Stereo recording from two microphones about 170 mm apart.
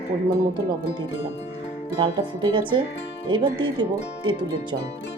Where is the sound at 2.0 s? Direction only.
30° right (ahead or behind).